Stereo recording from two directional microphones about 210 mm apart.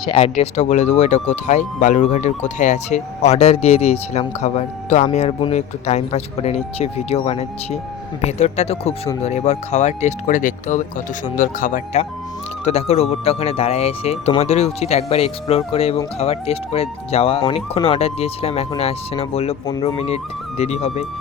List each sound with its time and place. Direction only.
0.0 s speech: 30° left (ahead or behind)
19.6 s speech: 15° left (ahead or behind)
20.6 s speech: 30° left (ahead or behind)